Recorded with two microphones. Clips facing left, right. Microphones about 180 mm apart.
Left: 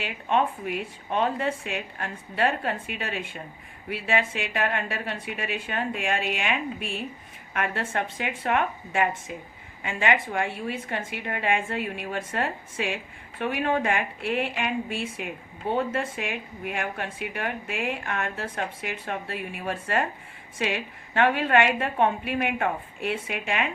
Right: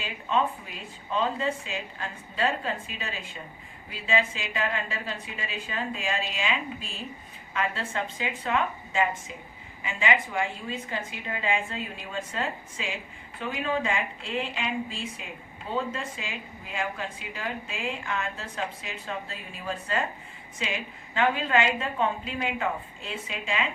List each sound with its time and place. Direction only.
0.0 s a woman's voice: 65° left (ahead or behind)